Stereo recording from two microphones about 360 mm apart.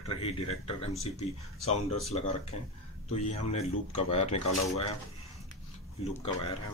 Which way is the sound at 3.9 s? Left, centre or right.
Centre.